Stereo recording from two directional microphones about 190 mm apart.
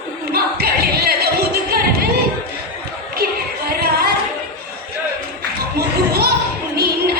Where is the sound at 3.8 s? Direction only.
55° right (ahead or behind).